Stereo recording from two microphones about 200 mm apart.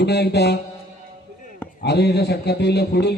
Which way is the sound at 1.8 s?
55° left (ahead or behind).